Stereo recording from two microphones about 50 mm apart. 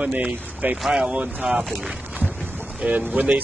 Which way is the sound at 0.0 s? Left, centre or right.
Right.